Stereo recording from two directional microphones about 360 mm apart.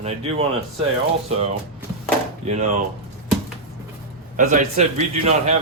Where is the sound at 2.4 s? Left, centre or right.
Centre.